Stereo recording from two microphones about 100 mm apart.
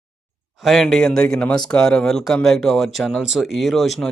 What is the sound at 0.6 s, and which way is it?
A man's voice, centre (ahead or behind).